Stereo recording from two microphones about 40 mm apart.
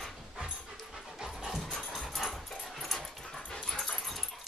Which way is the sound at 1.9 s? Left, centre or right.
Centre.